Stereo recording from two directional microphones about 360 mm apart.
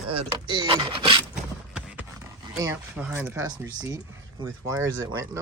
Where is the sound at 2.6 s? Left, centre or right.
Centre.